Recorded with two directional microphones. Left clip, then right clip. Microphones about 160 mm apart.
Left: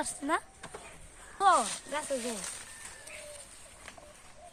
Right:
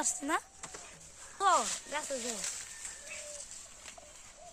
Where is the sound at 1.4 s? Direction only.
25° right (ahead or behind).